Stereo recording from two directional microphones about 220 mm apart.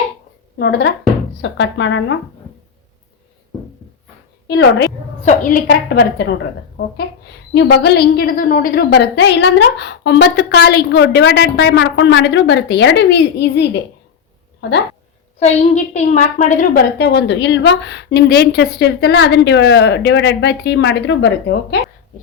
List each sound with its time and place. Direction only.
0.6 s a woman's voice: 50° left (ahead or behind)
4.4 s a woman's voice: 50° left (ahead or behind)
5.2 s a woman's voice: 40° left (ahead or behind)
7.5 s a woman's voice: 50° left (ahead or behind)
15.4 s a woman's voice: 30° left (ahead or behind)
17.0 s a woman's voice: 50° left (ahead or behind)